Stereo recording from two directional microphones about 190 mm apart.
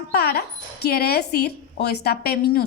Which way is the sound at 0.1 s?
55° left (ahead or behind).